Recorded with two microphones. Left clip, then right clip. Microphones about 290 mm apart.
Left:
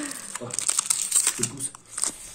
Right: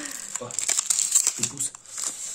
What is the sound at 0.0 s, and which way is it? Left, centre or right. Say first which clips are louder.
Crumpling: even; centre.